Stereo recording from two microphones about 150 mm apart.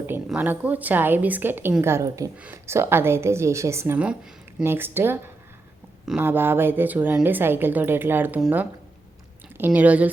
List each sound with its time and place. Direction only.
0.3 s a woman's voice: 10° right (ahead or behind)